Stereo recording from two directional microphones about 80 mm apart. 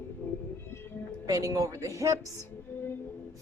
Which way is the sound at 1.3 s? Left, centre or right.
Right.